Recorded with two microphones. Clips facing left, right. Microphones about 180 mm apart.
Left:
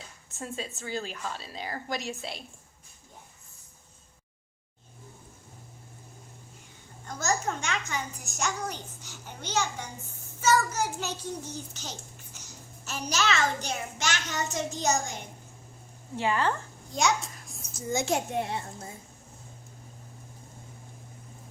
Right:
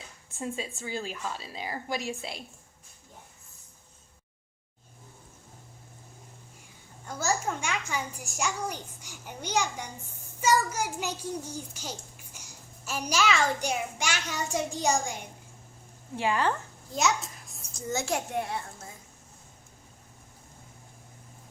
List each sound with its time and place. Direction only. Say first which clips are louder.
0.3 s a child's voice: right 2 dB; 15° right (ahead or behind)
7.1 s a child's voice: even; 10° right (ahead or behind)
16.9 s a child's voice: left 1 dB; centre (ahead or behind)
17.7 s a child's voice: left 2 dB; 15° left (ahead or behind)